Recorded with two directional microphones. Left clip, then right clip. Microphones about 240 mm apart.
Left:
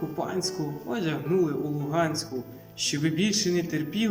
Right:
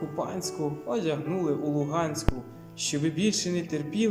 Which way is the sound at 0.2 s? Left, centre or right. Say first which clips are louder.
Left 1 dB; right.